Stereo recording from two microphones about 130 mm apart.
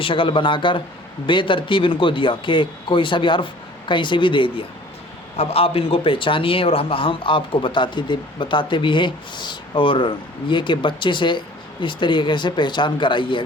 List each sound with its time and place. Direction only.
0.0 s speech: 40° left (ahead or behind)